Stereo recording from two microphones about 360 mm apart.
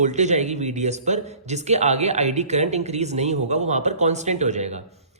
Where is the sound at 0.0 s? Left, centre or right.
Centre.